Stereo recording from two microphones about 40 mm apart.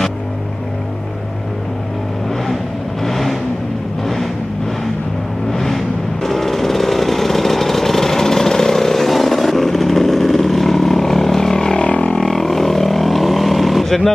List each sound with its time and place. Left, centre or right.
3.0 s vehicle: centre
5.5 s music: centre
11.8 s didgeridoo: left
12.2 s vehicle: centre